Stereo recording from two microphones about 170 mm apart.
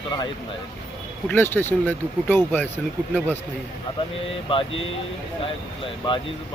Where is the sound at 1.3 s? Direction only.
15° left (ahead or behind).